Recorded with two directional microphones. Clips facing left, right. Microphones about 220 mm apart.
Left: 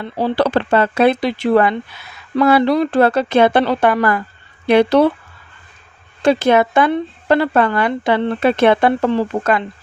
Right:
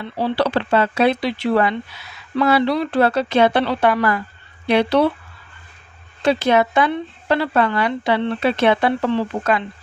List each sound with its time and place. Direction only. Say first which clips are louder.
0.0 s speech: left 3 dB; 45° left (ahead or behind)
6.2 s speech: left 3 dB; 50° left (ahead or behind)